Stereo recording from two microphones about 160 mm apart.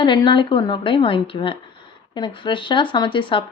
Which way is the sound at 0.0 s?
30° left (ahead or behind).